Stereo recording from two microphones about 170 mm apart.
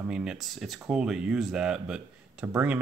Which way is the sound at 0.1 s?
5° right (ahead or behind).